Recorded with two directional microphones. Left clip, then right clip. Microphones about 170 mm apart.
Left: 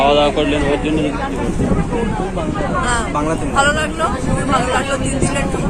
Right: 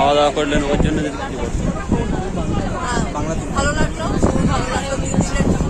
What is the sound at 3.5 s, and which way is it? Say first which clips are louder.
Speech: left 5 dB; 15° right (ahead or behind).